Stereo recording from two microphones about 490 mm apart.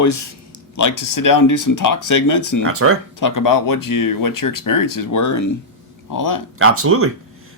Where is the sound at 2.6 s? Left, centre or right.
Right.